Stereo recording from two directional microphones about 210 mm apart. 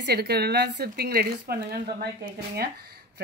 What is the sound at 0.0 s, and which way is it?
Speech, 50° right (ahead or behind).